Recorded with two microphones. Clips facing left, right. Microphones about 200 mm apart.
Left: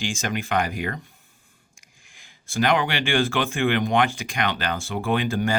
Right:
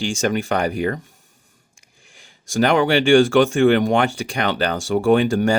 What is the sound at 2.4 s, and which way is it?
Speech, 45° right (ahead or behind).